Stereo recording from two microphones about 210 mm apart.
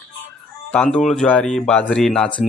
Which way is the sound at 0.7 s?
5° left (ahead or behind).